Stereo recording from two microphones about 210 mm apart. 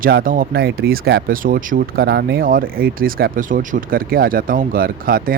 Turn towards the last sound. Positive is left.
turn(degrees=-45)  # may be behind; listen again after turning